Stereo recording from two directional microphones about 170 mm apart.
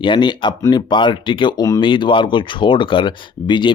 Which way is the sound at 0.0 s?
25° left (ahead or behind).